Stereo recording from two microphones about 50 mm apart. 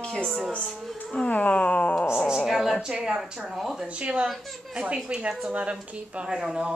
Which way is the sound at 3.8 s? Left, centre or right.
Right.